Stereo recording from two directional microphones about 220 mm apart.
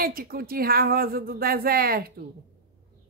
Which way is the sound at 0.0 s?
40° right (ahead or behind).